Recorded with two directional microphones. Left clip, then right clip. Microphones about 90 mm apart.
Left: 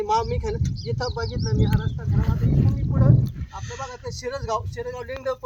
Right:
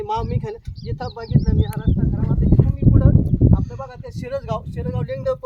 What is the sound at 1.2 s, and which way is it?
Speech, 40° right (ahead or behind).